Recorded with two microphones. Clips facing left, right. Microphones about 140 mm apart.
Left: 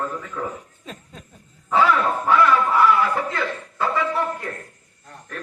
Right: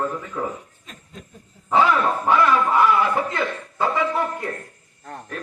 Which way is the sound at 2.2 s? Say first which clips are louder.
Left 1 dB; 15° right (ahead or behind).